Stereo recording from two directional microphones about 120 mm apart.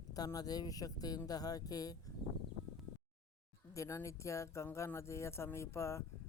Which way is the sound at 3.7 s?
25° left (ahead or behind).